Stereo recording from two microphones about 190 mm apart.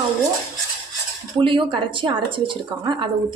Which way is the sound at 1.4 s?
25° right (ahead or behind).